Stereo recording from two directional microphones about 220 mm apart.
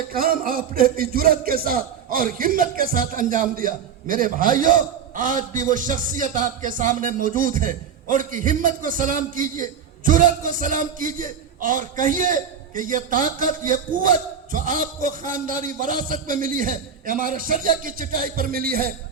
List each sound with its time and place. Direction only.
0.1 s music: 40° right (ahead or behind)